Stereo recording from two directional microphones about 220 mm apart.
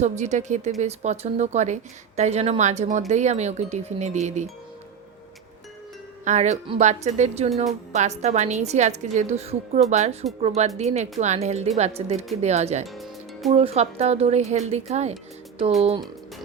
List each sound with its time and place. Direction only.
0.0 s speech: 35° right (ahead or behind)
6.2 s speech: 30° right (ahead or behind)
12.9 s music: centre (ahead or behind)
13.5 s speech: 25° right (ahead or behind)